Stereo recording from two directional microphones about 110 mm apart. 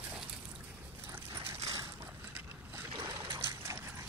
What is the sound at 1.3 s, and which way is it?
Mechanisms, 30° right (ahead or behind).